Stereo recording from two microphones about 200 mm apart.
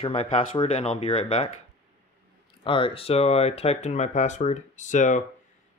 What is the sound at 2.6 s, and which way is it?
Speech, 25° left (ahead or behind).